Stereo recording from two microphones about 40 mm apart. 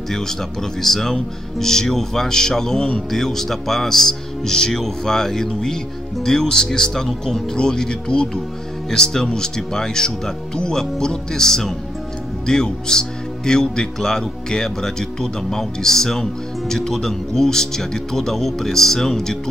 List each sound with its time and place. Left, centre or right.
0.1 s speech: centre
7.5 s speech: centre